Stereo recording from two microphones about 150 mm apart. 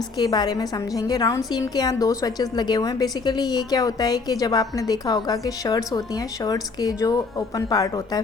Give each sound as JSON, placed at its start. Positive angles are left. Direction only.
{"t": 0.2, "sound": "a woman's voice", "side_deg": 25}